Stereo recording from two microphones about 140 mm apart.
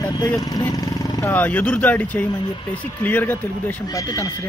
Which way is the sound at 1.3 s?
10° left (ahead or behind).